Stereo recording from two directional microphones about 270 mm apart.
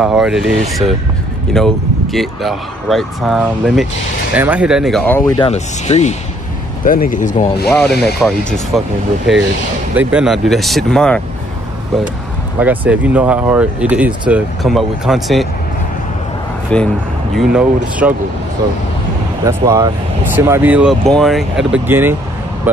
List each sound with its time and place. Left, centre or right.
0.0 s speech: centre
5.4 s speech: left
7.7 s speech: centre
9.9 s speech: centre
12.5 s speech: centre
16.7 s speech: centre
19.4 s speech: centre